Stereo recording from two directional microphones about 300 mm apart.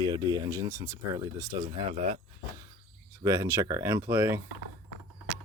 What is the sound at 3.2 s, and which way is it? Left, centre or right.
Speech, centre.